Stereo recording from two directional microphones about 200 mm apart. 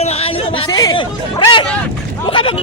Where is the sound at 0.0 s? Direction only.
30° left (ahead or behind).